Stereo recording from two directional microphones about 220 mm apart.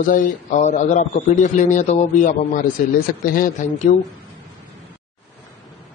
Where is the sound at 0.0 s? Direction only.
35° left (ahead or behind).